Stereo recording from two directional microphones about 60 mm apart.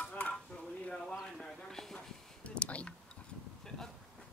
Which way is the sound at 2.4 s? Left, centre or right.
Left.